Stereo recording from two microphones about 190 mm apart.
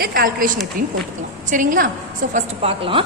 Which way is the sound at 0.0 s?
50° right (ahead or behind).